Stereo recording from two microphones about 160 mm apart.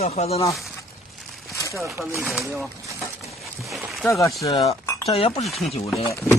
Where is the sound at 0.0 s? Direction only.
40° left (ahead or behind).